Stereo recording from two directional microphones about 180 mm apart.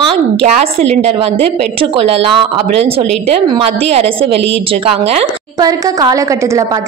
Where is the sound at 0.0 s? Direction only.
35° right (ahead or behind).